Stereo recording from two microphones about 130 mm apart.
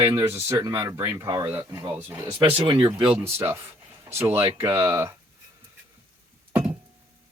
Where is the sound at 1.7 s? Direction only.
30° right (ahead or behind).